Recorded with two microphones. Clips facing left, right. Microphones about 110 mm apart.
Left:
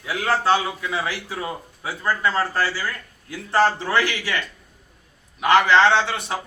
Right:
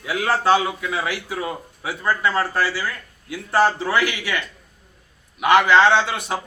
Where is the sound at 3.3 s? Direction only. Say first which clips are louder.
Right 1 dB; 5° right (ahead or behind).